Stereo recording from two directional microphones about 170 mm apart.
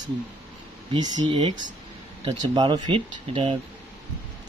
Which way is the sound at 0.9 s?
30° right (ahead or behind).